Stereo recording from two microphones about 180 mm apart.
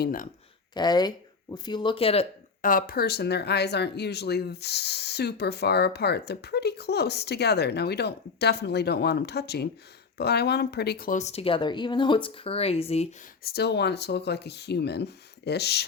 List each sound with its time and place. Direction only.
0.0 s speech: 50° left (ahead or behind)
0.7 s speech: 25° left (ahead or behind)
2.6 s speech: 50° left (ahead or behind)
11.2 s speech: 35° left (ahead or behind)
13.4 s speech: 65° left (ahead or behind)